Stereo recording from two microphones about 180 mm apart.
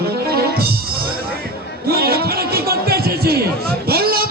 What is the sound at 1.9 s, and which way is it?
Music, 60° right (ahead or behind).